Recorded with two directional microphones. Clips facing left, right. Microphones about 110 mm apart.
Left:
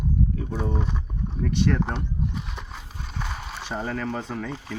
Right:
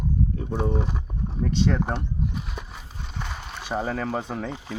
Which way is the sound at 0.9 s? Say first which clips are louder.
Even; 15° right (ahead or behind).